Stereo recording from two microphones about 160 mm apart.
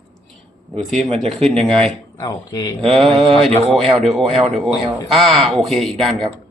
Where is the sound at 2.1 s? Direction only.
25° left (ahead or behind).